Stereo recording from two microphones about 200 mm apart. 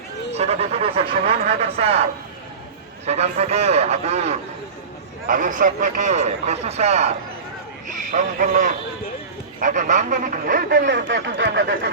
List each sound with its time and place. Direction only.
0.3 s a man's voice: 30° right (ahead or behind)
3.1 s a man's voice: 35° right (ahead or behind); by 11.6 s 60° right (ahead or behind)